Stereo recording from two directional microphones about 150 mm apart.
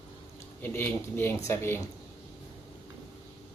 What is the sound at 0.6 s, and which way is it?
Speech, 15° left (ahead or behind).